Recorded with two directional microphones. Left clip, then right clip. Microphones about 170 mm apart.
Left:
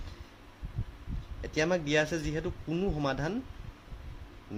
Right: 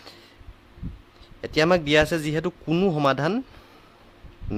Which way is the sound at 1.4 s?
45° right (ahead or behind).